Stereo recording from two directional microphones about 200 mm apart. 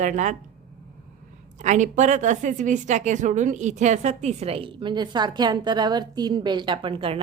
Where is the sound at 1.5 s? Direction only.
35° right (ahead or behind).